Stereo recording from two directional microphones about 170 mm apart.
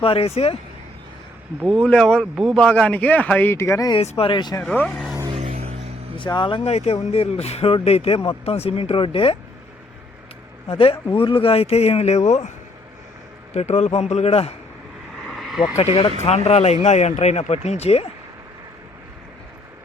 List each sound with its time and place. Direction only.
0.0 s speech: 35° left (ahead or behind)
1.8 s speech: 5° left (ahead or behind); by 4.0 s 20° left (ahead or behind)
4.0 s speech: 35° left (ahead or behind)
4.6 s speech: 5° left (ahead or behind)
5.3 s music: 35° right (ahead or behind)
6.1 s speech: 30° left (ahead or behind)
10.7 s speech: 30° left (ahead or behind)
13.5 s speech: 40° left (ahead or behind)
15.2 s a sound: centre (ahead or behind)
15.7 s speech: 35° left (ahead or behind)